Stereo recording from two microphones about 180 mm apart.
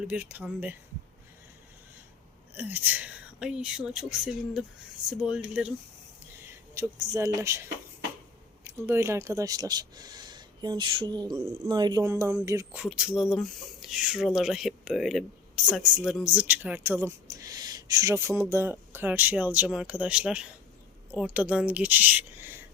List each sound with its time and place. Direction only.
0.0 s speech: 5° right (ahead or behind)
2.6 s speech: 10° right (ahead or behind)
6.5 s speech: 15° right (ahead or behind)
12.8 s speech: 5° right (ahead or behind)